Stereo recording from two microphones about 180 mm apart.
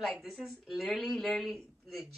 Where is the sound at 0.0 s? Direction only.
Centre (ahead or behind).